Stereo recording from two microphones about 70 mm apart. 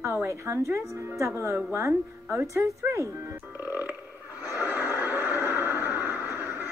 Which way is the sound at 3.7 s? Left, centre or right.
Right.